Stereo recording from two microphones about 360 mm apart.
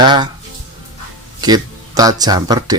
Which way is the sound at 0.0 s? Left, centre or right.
Centre.